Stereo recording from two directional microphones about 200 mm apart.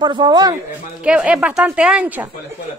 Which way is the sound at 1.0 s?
5° right (ahead or behind).